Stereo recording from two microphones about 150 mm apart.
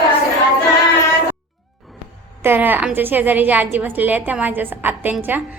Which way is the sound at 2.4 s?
15° right (ahead or behind).